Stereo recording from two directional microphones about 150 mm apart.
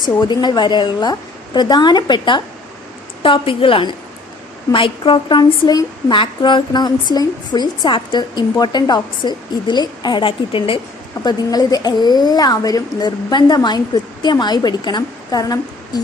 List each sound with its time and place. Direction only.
0.0 s a woman's voice: 30° left (ahead or behind)
11.2 s a woman's voice: 25° left (ahead or behind)